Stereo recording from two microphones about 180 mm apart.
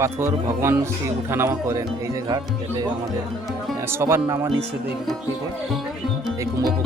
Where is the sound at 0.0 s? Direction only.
15° right (ahead or behind).